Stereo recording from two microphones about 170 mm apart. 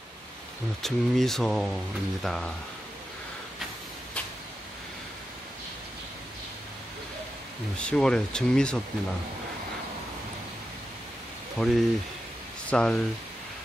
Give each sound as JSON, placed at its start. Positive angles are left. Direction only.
{"t": 0.8, "sound": "speech", "side_deg": 0}
{"t": 7.7, "sound": "speech", "side_deg": 5}
{"t": 11.5, "sound": "speech", "side_deg": 0}